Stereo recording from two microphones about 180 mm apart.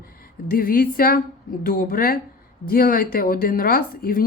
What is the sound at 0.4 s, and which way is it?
Speech, 55° left (ahead or behind).